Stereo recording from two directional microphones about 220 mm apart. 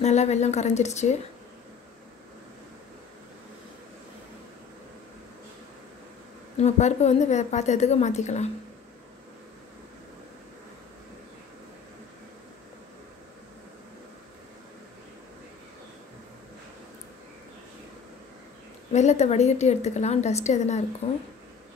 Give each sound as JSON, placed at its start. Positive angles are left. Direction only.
{"t": 0.0, "sound": "a woman's voice", "side_deg": 30}
{"t": 6.5, "sound": "a woman's voice", "side_deg": 30}
{"t": 18.9, "sound": "a woman's voice", "side_deg": 30}